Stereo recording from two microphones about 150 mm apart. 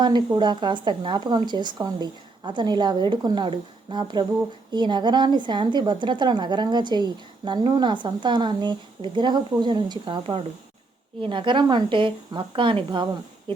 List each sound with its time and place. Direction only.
0.0 s a woman's voice: 30° right (ahead or behind)